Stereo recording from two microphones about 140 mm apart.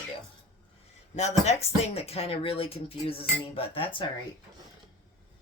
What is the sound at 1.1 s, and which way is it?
Speech, 50° left (ahead or behind).